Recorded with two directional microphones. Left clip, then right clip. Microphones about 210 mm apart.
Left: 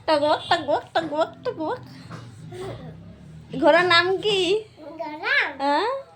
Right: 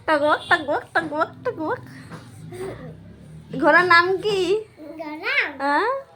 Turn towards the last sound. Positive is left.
turn(degrees=0)  # may be behind; listen again after turning